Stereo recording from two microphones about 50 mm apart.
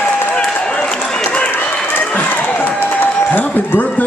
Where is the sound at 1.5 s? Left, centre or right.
Left.